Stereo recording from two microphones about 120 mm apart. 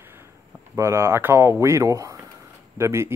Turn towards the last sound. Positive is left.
turn(degrees=-20)  # may be behind; listen again after turning